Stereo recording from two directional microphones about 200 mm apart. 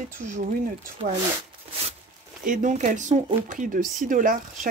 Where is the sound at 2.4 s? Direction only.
40° right (ahead or behind).